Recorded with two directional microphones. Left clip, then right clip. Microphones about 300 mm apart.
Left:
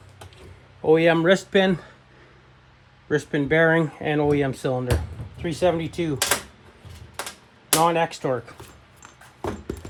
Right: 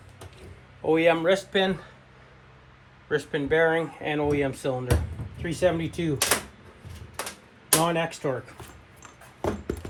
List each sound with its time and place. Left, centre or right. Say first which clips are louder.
0.8 s a man's voice: left 4 dB; left
3.1 s a man's voice: left 3 dB; left
6.1 s speech: left 1 dB; centre
7.2 s typewriter: left 2 dB; centre
7.8 s a man's voice: left 6 dB; left
9.4 s a sound: right 1 dB; centre